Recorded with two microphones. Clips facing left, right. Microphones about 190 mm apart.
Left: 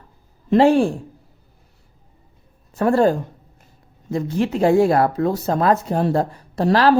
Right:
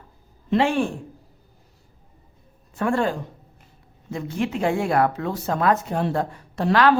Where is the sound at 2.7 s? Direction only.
40° left (ahead or behind).